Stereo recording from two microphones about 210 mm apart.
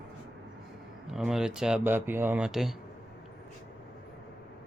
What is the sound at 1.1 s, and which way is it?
Speech, centre (ahead or behind).